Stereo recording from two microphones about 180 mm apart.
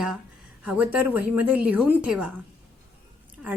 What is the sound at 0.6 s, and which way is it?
A woman's voice, 10° right (ahead or behind).